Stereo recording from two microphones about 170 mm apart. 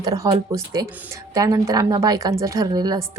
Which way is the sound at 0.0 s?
20° right (ahead or behind).